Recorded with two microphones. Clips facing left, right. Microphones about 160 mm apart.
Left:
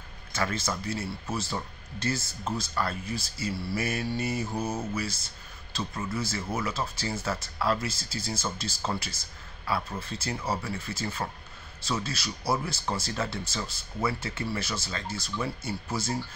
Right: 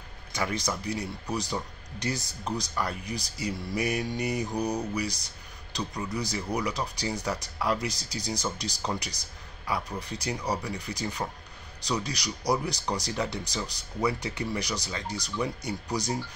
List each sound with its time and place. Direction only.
0.3 s speech: 15° right (ahead or behind)